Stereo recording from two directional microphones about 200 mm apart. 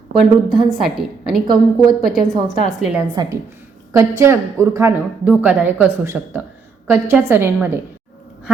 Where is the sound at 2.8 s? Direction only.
5° right (ahead or behind).